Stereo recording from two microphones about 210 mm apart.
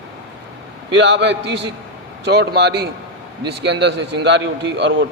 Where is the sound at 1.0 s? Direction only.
60° right (ahead or behind).